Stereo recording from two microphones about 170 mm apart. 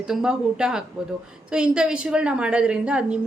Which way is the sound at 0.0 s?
5° right (ahead or behind).